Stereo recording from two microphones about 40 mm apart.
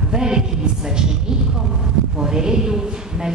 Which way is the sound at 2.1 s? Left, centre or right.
Centre.